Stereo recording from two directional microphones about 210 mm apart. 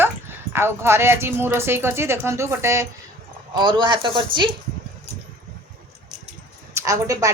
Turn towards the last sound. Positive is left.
turn(degrees=-15)  # may be behind; listen again after turning